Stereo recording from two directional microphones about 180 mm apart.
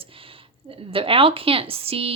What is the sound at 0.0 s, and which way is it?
A woman's voice, 30° right (ahead or behind).